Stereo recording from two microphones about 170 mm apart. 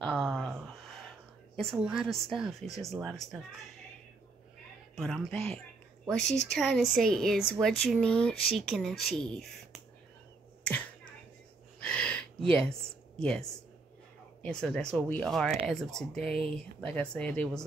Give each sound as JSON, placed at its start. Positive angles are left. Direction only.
{"t": 0.0, "sound": "a sound", "side_deg": 0}
{"t": 1.6, "sound": "speech", "side_deg": 0}
{"t": 4.9, "sound": "speech", "side_deg": 0}
{"t": 11.8, "sound": "a sound", "side_deg": 5}
{"t": 13.2, "sound": "speech", "side_deg": 5}
{"t": 16.3, "sound": "speech", "side_deg": -35}
{"t": 16.5, "sound": "speech", "side_deg": 5}